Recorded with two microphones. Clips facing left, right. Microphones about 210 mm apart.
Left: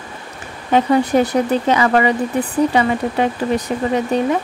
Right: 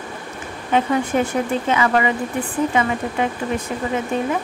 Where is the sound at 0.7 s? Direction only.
35° left (ahead or behind).